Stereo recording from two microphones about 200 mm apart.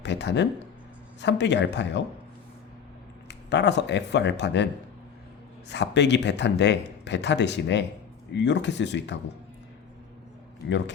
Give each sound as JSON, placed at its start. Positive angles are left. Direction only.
{"t": 0.0, "sound": "speech", "side_deg": 60}
{"t": 3.2, "sound": "speech", "side_deg": 60}
{"t": 10.7, "sound": "speech", "side_deg": 60}